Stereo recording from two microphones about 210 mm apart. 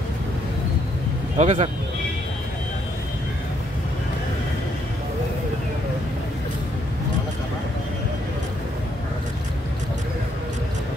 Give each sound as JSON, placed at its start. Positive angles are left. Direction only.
{"t": 1.4, "sound": "speech", "side_deg": -35}